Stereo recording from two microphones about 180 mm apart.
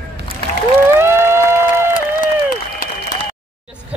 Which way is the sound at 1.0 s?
15° right (ahead or behind).